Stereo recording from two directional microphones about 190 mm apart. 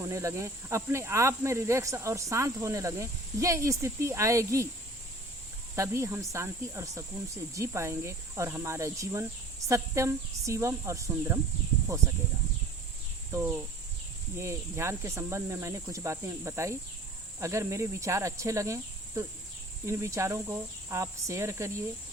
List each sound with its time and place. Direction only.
0.0 s speech: 15° right (ahead or behind)
5.7 s speech: 15° right (ahead or behind)
13.3 s speech: 10° right (ahead or behind)